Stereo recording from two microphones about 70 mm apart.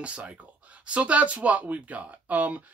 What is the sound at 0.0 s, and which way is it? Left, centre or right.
Speech, centre.